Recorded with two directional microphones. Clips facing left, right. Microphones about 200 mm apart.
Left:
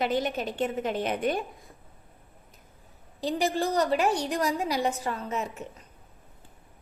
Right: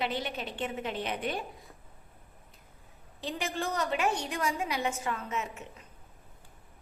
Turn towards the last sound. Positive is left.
turn(degrees=35)  # may be behind; listen again after turning